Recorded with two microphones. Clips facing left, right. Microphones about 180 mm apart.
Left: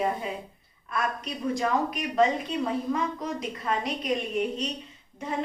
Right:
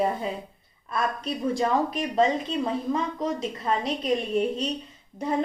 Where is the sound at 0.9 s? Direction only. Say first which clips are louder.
Right 3 dB; 30° right (ahead or behind).